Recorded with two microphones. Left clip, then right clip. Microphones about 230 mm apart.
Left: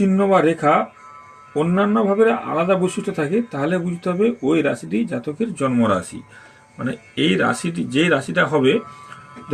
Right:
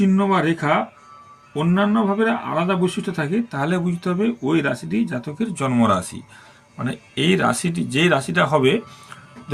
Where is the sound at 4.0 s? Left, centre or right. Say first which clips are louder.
Left 3 dB; right.